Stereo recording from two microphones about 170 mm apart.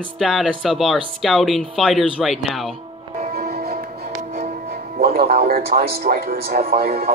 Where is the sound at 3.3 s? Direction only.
60° right (ahead or behind).